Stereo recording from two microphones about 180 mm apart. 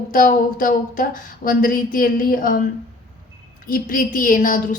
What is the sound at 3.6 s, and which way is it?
A woman's voice, 50° left (ahead or behind).